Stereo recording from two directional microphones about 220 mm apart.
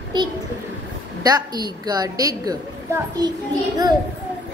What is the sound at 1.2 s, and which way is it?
A woman's voice, 20° right (ahead or behind).